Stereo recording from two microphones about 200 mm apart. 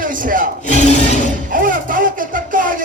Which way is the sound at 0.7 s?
35° left (ahead or behind).